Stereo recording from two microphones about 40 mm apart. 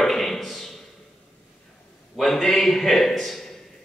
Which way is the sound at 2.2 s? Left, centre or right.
Centre.